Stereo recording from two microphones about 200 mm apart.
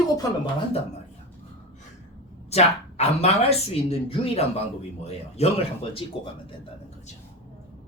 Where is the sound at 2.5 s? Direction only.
30° left (ahead or behind).